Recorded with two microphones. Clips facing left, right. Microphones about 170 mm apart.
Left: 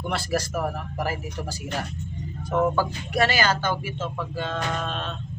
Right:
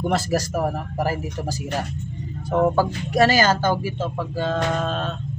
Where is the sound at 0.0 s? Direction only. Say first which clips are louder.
Right 5 dB; 40° right (ahead or behind).